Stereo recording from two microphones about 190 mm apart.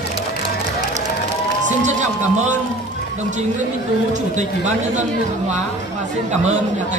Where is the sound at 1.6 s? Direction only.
40° right (ahead or behind).